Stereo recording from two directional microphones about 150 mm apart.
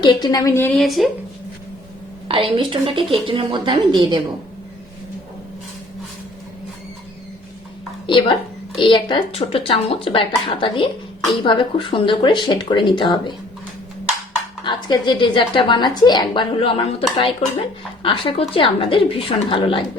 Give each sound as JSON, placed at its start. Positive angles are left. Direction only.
{"t": 0.0, "sound": "a woman's voice", "side_deg": 30}
{"t": 0.8, "sound": "speech", "side_deg": 0}
{"t": 2.2, "sound": "a woman's voice", "side_deg": -35}
{"t": 8.0, "sound": "a woman's voice", "side_deg": 30}
{"t": 14.6, "sound": "a woman's voice", "side_deg": 30}